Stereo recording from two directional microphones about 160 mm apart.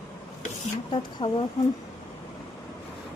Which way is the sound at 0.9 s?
30° left (ahead or behind).